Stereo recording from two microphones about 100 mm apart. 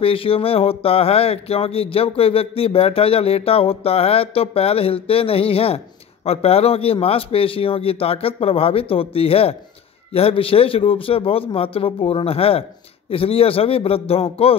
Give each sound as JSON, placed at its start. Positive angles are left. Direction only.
{"t": 0.0, "sound": "speech", "side_deg": 65}
{"t": 6.2, "sound": "speech", "side_deg": 90}